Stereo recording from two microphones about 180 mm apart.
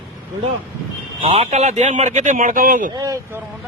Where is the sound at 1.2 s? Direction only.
35° right (ahead or behind).